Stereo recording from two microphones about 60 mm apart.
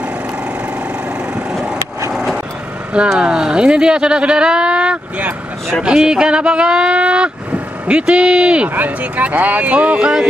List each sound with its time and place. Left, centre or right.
3.2 s speech: centre